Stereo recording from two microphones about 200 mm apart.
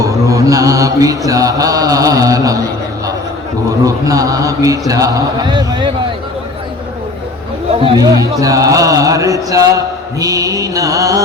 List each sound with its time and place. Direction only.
0.0 s a man's voice: 15° right (ahead or behind)
3.7 s a man's voice: 15° right (ahead or behind)
7.7 s a man's voice: 25° right (ahead or behind)